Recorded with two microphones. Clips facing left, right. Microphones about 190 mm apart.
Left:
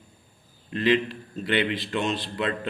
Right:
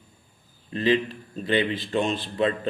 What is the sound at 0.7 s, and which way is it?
A man's voice, 35° right (ahead or behind).